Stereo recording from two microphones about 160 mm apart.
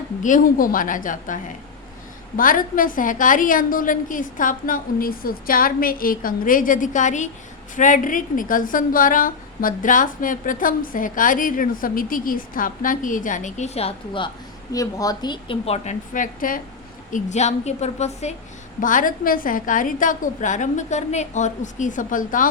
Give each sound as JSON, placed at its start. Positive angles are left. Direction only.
{"t": 0.2, "sound": "a woman's voice", "side_deg": 55}
{"t": 14.7, "sound": "a woman's voice", "side_deg": 20}
{"t": 18.8, "sound": "a woman's voice", "side_deg": 55}